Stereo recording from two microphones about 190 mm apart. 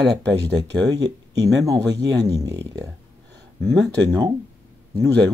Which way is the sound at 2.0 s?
20° right (ahead or behind).